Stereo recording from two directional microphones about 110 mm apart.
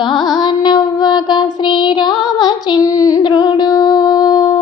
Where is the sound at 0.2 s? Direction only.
40° left (ahead or behind).